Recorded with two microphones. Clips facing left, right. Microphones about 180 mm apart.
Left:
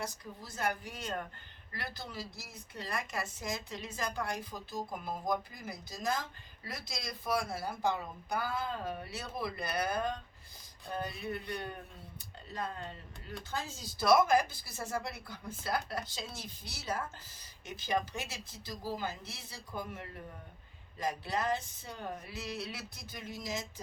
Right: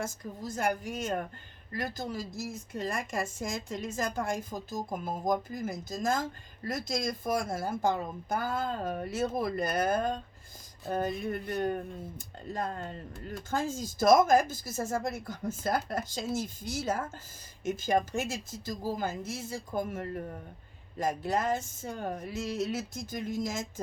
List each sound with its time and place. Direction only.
0.0 s speech: 45° right (ahead or behind)